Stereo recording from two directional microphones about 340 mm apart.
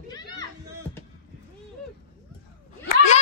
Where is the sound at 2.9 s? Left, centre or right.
Left.